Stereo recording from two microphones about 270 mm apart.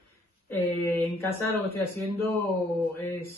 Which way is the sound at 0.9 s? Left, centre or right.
Centre.